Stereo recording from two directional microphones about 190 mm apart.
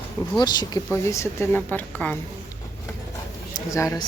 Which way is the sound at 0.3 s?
20° left (ahead or behind).